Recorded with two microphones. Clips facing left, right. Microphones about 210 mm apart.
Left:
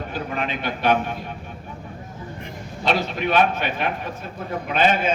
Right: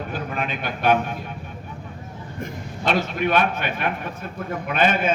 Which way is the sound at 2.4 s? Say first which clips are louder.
Right 2 dB; 50° right (ahead or behind).